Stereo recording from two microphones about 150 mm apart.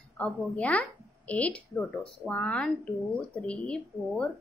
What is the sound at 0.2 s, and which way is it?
A woman's voice, 10° left (ahead or behind).